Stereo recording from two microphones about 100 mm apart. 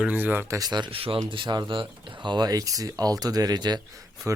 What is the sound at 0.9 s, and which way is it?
Speech, 65° right (ahead or behind).